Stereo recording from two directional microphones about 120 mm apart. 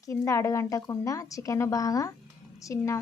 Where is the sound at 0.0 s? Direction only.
25° left (ahead or behind).